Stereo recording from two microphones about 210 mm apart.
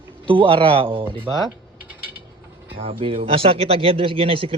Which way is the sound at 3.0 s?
25° right (ahead or behind).